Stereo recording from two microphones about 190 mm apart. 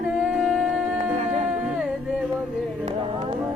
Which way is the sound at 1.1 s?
35° right (ahead or behind).